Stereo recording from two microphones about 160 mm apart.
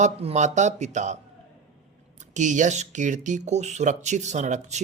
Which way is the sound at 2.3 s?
50° right (ahead or behind).